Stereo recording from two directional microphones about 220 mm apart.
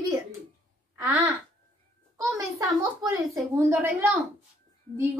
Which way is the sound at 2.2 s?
15° right (ahead or behind).